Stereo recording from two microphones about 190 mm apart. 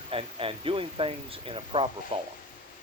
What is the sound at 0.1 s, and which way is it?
Speech, 30° right (ahead or behind).